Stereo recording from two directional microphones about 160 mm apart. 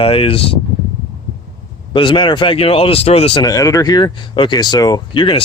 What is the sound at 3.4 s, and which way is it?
Speech, 20° left (ahead or behind).